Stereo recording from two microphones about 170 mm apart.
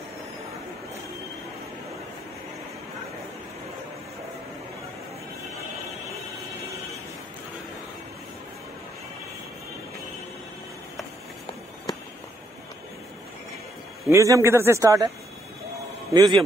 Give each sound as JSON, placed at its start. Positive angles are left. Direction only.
{"t": 14.0, "sound": "a man's voice", "side_deg": -20}
{"t": 16.1, "sound": "a man's voice", "side_deg": -20}